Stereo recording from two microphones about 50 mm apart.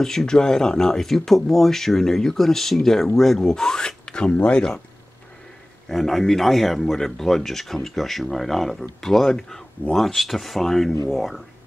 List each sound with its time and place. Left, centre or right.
0.0 s speech: centre
5.9 s speech: centre